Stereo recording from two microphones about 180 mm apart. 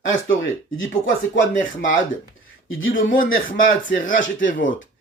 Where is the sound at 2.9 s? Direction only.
50° left (ahead or behind).